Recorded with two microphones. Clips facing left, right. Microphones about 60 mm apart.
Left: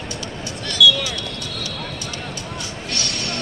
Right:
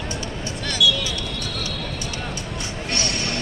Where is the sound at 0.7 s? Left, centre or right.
Left.